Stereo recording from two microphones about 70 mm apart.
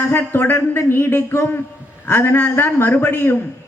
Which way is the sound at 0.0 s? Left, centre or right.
Left.